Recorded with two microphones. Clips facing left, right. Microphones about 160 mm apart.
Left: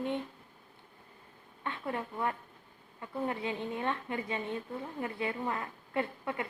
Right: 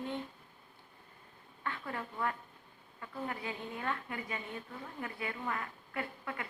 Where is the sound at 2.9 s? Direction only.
25° left (ahead or behind).